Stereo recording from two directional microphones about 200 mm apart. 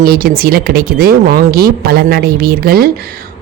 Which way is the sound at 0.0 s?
50° right (ahead or behind).